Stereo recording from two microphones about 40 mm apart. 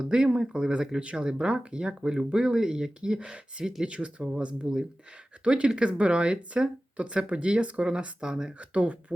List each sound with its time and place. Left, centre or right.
0.0 s speech: right
3.2 s speech: right
3.6 s speech: centre
3.8 s speech: right
8.5 s speech: right